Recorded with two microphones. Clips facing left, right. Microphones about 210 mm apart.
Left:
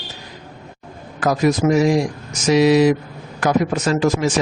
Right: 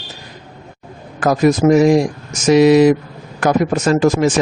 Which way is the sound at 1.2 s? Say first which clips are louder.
Right 4 dB; 50° right (ahead or behind).